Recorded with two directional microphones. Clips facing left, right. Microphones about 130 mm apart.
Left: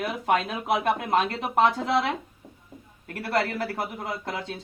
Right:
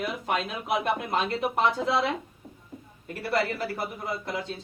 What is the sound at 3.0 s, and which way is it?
Speech, 65° left (ahead or behind).